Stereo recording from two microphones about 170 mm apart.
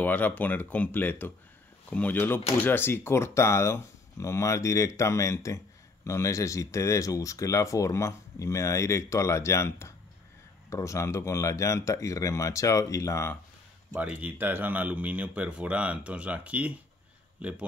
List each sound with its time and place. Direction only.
0.0 s speech: 10° left (ahead or behind)
13.9 s speech: 10° right (ahead or behind)